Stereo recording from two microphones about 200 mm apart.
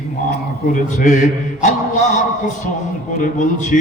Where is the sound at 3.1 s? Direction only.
40° left (ahead or behind).